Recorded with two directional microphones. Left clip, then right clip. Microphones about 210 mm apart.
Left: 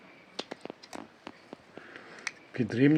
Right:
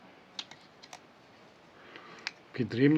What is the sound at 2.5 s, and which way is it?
Speech, 15° left (ahead or behind).